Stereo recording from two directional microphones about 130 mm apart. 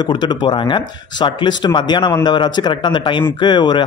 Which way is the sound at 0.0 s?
35° left (ahead or behind).